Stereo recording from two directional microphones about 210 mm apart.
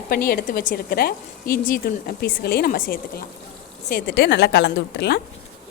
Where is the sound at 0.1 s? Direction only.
45° left (ahead or behind).